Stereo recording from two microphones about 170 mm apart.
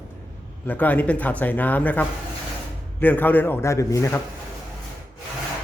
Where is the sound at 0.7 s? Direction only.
10° left (ahead or behind).